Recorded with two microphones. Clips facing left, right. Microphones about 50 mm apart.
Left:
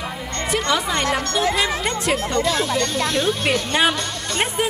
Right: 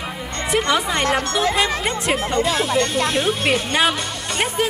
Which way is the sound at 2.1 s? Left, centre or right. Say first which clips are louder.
Right 1 dB; right.